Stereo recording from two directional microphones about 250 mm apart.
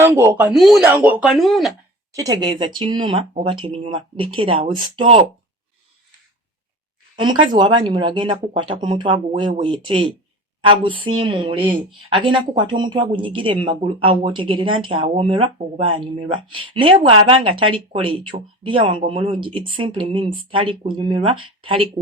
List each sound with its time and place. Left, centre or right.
0.0 s speech: centre
2.1 s speech: centre
7.2 s speech: centre